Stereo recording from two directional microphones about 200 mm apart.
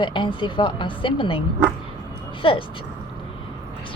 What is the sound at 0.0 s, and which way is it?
A woman's voice, 25° left (ahead or behind).